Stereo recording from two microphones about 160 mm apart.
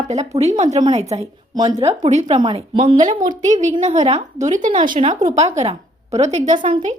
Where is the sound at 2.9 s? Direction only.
50° right (ahead or behind).